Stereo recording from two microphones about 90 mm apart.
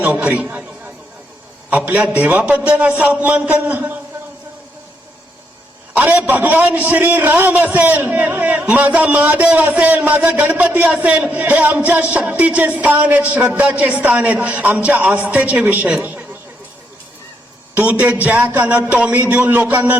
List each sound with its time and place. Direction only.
0.0 s a man's voice: 20° right (ahead or behind)
1.7 s a woman's voice: 15° right (ahead or behind)
5.9 s a man's voice: 20° right (ahead or behind)
16.0 s a sound: 20° right (ahead or behind)
17.7 s a man's voice: 20° right (ahead or behind)